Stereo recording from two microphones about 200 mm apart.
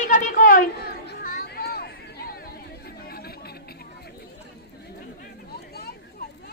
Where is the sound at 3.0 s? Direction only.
50° left (ahead or behind).